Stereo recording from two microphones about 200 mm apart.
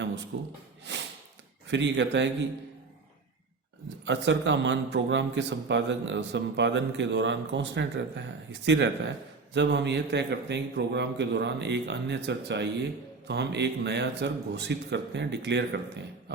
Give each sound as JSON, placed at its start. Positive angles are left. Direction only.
{"t": 0.3, "sound": "a man's voice", "side_deg": -65}
{"t": 1.6, "sound": "a man's voice", "side_deg": -65}
{"t": 4.0, "sound": "a man's voice", "side_deg": -65}